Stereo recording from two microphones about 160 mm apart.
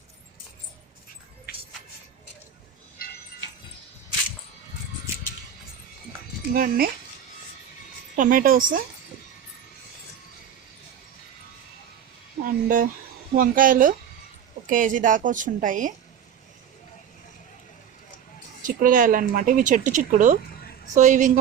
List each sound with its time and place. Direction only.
6.5 s speech: 65° right (ahead or behind)
8.1 s a woman's voice: 55° right (ahead or behind)
12.4 s a woman's voice: 60° right (ahead or behind)
18.6 s a woman's voice: 60° right (ahead or behind)